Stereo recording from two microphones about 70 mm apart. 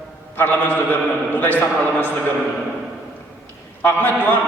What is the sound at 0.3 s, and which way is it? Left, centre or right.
A man's voice, left.